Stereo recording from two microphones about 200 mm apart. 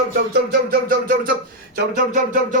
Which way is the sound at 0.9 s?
45° right (ahead or behind).